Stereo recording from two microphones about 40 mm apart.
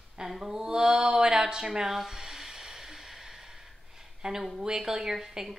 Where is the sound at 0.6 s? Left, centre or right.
Centre.